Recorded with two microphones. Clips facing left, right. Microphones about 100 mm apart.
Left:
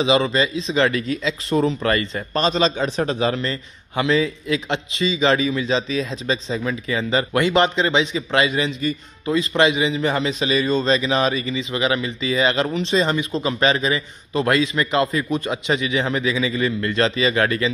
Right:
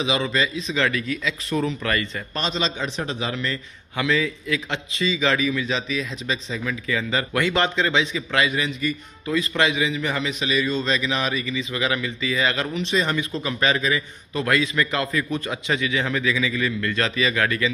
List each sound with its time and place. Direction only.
0.0 s speech: 30° left (ahead or behind)